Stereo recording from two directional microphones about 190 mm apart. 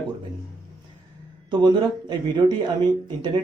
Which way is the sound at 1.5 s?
25° right (ahead or behind).